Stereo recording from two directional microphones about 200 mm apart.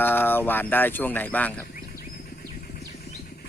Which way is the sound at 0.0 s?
10° left (ahead or behind).